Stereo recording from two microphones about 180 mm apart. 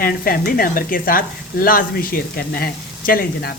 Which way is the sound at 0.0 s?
55° left (ahead or behind).